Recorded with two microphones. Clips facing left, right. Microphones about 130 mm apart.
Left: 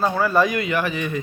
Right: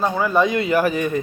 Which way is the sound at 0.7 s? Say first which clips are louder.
Right 5 dB; 40° right (ahead or behind).